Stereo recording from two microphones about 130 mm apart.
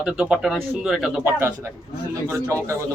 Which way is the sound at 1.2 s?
20° right (ahead or behind).